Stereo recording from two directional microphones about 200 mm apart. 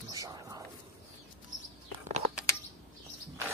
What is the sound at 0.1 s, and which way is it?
Whispering, 15° right (ahead or behind).